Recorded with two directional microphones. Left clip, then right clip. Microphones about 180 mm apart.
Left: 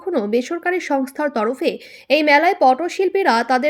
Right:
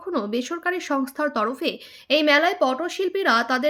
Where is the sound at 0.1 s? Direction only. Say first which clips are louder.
Left 6 dB; 15° left (ahead or behind).